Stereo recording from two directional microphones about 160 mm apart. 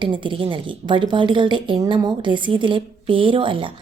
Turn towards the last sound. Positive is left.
turn(degrees=-30)  # may be behind; listen again after turning